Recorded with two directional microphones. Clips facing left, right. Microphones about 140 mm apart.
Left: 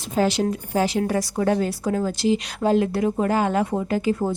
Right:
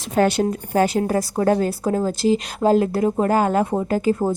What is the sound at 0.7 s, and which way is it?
A woman's voice, 50° right (ahead or behind).